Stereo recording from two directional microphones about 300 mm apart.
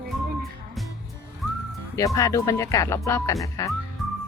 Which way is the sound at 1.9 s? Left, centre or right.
Centre.